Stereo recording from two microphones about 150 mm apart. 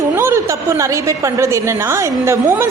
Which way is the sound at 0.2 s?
20° right (ahead or behind).